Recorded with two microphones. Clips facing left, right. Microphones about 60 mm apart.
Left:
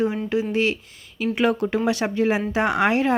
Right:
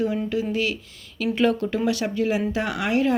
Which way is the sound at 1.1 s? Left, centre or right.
Centre.